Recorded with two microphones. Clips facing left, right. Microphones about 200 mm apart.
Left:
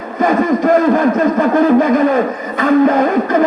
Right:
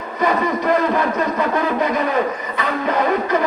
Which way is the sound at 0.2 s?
50° left (ahead or behind).